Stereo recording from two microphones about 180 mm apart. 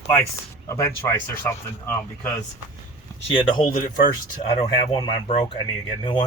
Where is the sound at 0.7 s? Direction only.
15° left (ahead or behind).